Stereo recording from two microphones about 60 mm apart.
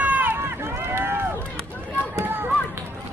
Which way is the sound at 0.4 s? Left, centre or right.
Right.